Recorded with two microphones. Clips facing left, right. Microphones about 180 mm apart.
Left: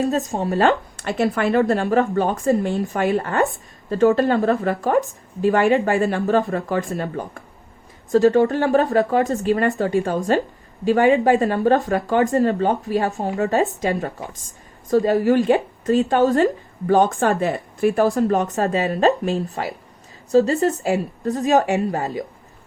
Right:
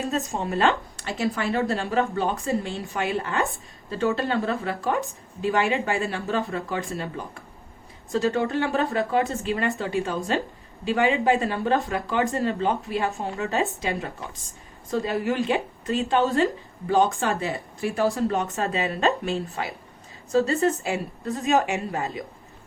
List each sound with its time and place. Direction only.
0.1 s speech: 35° left (ahead or behind)
1.0 s a woman's voice: 60° left (ahead or behind); by 13.7 s 40° left (ahead or behind)
14.8 s a woman's voice: 40° left (ahead or behind); by 18.0 s 60° left (ahead or behind)
18.0 s speech: 40° left (ahead or behind)